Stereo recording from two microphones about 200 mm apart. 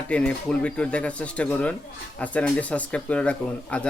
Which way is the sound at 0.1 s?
5° left (ahead or behind).